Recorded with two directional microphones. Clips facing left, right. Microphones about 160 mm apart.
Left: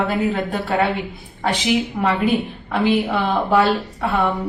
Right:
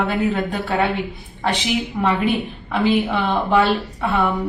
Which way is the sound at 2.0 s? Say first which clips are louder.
Right 2 dB; centre (ahead or behind).